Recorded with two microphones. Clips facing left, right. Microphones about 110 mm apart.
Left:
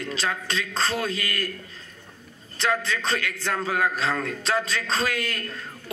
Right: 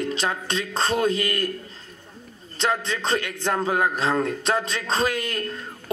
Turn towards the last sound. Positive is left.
turn(degrees=-20)  # may be behind; listen again after turning